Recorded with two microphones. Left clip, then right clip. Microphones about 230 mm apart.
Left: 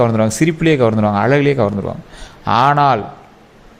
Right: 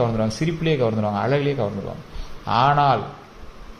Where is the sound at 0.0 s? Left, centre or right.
Left.